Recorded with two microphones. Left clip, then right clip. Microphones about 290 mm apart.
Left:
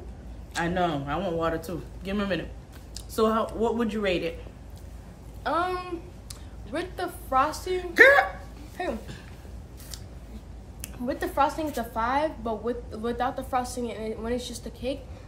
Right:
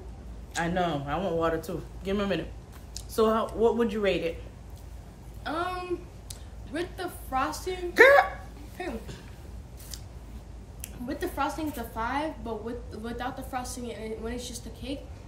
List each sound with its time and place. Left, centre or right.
0.6 s speech: centre
5.4 s a woman's voice: centre
7.9 s speech: centre
8.8 s a woman's voice: centre
11.1 s a woman's voice: centre